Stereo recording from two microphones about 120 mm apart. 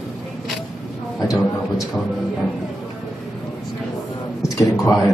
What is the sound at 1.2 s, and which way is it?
Speech, 30° left (ahead or behind).